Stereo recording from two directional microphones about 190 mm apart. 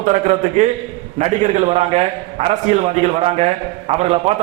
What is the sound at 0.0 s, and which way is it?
A man's voice, 40° right (ahead or behind).